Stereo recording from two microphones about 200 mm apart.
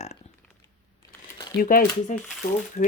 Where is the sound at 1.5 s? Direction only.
45° left (ahead or behind).